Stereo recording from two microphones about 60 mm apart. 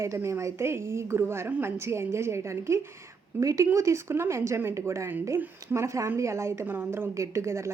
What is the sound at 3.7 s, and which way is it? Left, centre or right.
A woman's voice, right.